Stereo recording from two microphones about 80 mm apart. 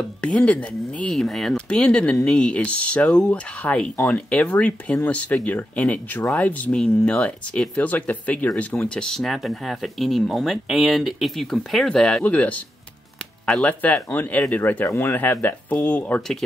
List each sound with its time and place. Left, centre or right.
0.2 s speech: centre
1.2 s speech: centre; by 16.2 s left
16.2 s speech: centre